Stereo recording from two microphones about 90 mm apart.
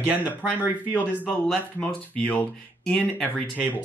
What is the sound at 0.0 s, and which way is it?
Speech, 20° right (ahead or behind).